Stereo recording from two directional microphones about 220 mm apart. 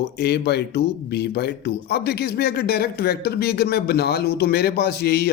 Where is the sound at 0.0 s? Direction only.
50° left (ahead or behind).